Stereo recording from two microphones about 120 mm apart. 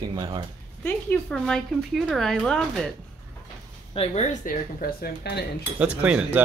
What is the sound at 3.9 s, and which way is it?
Speech, 70° left (ahead or behind).